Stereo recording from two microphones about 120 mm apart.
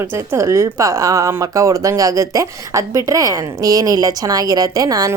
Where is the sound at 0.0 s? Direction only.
20° right (ahead or behind).